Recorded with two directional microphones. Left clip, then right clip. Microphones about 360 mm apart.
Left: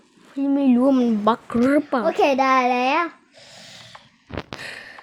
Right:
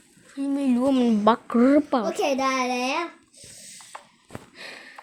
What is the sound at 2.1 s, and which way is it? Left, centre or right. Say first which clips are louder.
A child's voice: left 6 dB; left.